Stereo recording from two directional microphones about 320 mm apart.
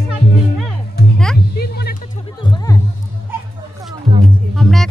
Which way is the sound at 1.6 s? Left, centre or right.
Left.